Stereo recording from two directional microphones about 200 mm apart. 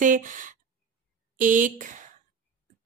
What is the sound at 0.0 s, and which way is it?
Speech, 40° right (ahead or behind).